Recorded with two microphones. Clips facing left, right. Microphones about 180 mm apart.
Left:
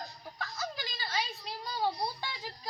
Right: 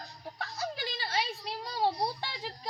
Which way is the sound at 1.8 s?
25° right (ahead or behind).